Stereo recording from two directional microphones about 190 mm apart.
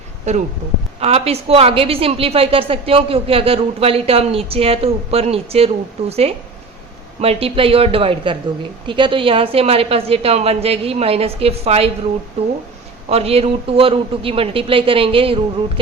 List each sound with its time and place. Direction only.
0.3 s a woman's voice: 35° right (ahead or behind)
13.1 s a man's voice: 30° right (ahead or behind)